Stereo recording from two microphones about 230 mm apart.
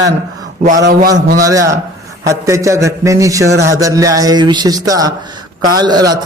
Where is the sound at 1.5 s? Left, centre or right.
Centre.